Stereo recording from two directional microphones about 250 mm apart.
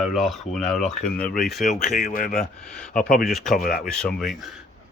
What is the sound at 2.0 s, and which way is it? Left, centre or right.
Speech, left.